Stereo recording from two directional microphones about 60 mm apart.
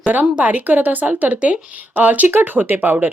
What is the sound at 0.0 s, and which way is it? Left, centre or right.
Speech, right.